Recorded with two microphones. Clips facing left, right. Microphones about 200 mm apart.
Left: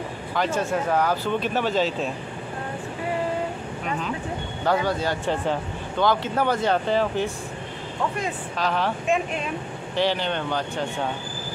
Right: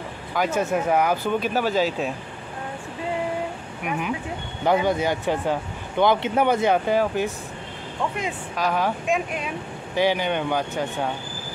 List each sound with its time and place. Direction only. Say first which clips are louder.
0.3 s speech: right 2 dB; 10° right (ahead or behind)
3.8 s speech: right 3 dB; 10° right (ahead or behind)
8.5 s speech: right 2 dB; 10° right (ahead or behind)
9.9 s speech: right 2 dB; 10° right (ahead or behind)